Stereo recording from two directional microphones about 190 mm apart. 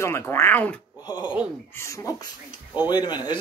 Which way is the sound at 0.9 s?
20° left (ahead or behind).